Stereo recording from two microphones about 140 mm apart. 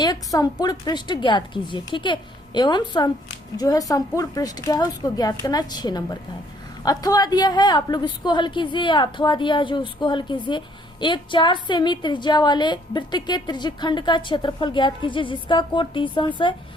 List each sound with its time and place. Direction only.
0.0 s a woman's voice: 30° left (ahead or behind)